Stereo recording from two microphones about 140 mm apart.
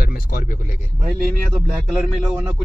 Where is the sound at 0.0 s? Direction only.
85° left.